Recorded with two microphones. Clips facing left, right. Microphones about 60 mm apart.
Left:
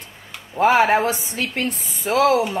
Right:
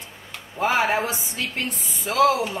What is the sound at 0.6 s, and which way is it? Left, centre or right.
A woman's voice, left.